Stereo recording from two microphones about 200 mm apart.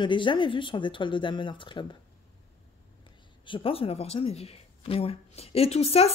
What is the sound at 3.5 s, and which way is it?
Speech, 25° left (ahead or behind).